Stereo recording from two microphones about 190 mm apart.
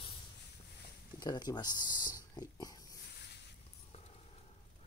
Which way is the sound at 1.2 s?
20° left (ahead or behind).